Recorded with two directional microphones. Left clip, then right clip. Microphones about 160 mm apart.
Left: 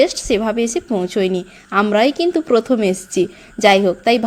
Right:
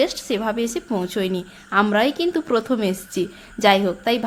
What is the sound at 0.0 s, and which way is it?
A woman's voice, 25° left (ahead or behind).